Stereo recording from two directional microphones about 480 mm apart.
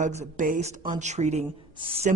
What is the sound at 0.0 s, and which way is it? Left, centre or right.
A man's voice, centre.